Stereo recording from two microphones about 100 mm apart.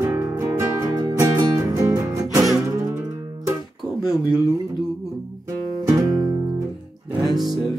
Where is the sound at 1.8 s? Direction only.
30° right (ahead or behind).